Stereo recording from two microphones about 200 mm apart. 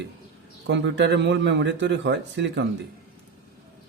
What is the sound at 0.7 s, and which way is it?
A man's voice, 65° right (ahead or behind).